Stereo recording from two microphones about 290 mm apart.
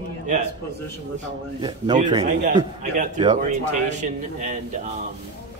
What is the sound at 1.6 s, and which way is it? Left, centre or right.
A man's voice, centre.